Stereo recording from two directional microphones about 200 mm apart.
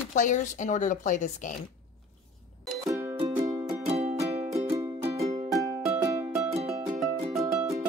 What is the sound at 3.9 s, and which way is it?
Music, 30° right (ahead or behind).